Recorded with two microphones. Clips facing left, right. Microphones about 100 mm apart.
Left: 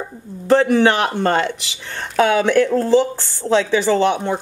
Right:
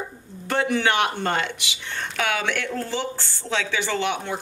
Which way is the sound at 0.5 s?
35° left (ahead or behind).